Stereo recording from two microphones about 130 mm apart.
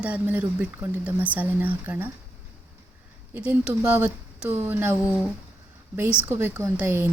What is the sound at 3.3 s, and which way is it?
A woman's voice, 10° right (ahead or behind).